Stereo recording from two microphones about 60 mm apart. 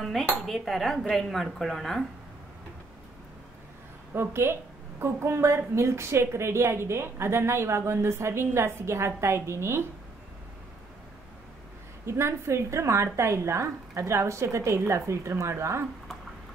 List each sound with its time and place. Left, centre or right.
0.0 s speech: centre
4.1 s a woman's voice: right
12.1 s a woman's voice: right